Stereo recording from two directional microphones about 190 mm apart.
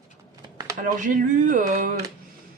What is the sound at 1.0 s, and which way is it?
Speech, 45° right (ahead or behind).